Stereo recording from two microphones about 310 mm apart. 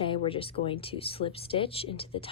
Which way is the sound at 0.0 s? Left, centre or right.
Centre.